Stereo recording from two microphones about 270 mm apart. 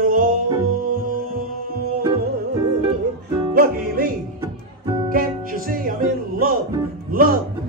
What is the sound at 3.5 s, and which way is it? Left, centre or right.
Music, right.